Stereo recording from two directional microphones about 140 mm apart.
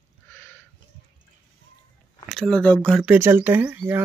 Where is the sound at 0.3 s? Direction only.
15° left (ahead or behind).